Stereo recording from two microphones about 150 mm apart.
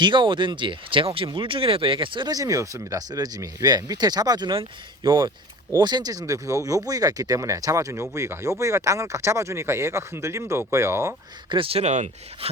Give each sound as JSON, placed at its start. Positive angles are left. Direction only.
{"t": 0.0, "sound": "speech", "side_deg": -30}
{"t": 11.4, "sound": "speech", "side_deg": -35}